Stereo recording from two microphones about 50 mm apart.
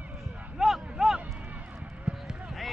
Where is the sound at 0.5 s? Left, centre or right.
Centre.